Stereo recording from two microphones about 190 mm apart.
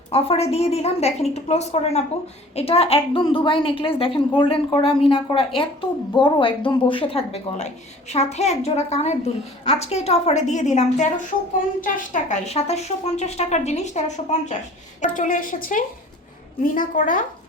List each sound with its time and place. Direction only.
0.1 s a woman's voice: 30° left (ahead or behind)